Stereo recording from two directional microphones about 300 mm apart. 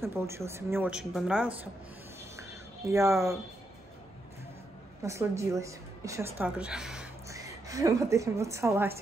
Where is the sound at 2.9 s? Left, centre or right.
Centre.